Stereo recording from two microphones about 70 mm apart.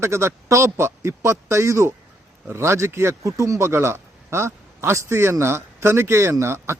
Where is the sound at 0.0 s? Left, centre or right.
Right.